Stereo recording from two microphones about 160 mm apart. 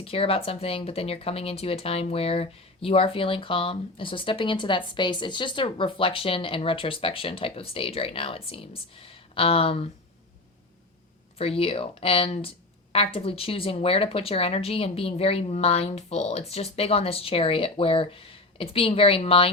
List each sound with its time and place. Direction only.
0.0 s speech: 35° left (ahead or behind)
11.3 s speech: 35° left (ahead or behind)